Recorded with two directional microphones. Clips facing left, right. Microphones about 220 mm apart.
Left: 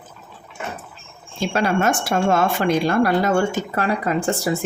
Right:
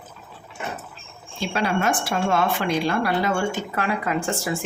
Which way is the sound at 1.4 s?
45° left (ahead or behind).